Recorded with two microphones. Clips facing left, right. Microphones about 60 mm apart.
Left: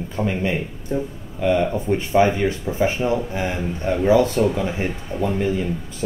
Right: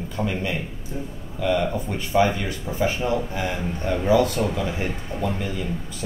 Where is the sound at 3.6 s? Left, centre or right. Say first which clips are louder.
Left 3 dB; centre.